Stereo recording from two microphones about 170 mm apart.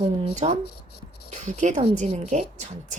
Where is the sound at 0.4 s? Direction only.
45° right (ahead or behind).